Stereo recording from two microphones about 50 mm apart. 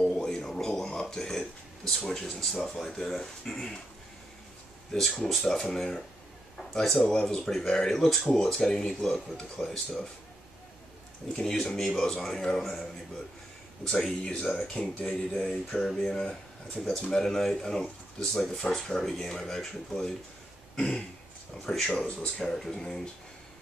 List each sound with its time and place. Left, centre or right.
0.0 s a sound: centre
1.1 s speech: centre
4.9 s speech: centre
11.3 s speech: centre
13.8 s speech: centre
14.8 s speech: left
15.3 s speech: centre
20.7 s throat clearing: centre
21.6 s speech: centre
22.0 s speech: left
22.4 s speech: centre